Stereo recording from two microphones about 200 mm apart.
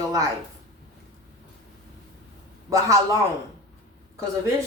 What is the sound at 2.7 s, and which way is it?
Speech, 15° right (ahead or behind).